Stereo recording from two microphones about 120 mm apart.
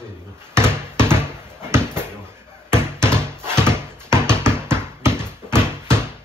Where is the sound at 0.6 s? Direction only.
20° right (ahead or behind).